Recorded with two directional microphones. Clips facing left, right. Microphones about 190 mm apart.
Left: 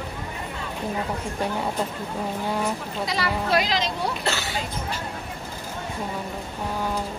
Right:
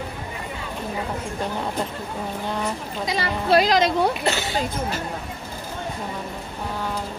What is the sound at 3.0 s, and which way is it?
Speech, 20° right (ahead or behind).